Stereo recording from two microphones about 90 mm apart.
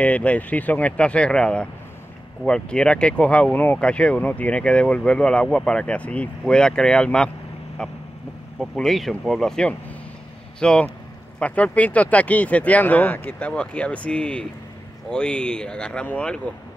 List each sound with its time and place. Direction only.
0.0 s speech: 15° left (ahead or behind)
8.7 s speech: 5° left (ahead or behind)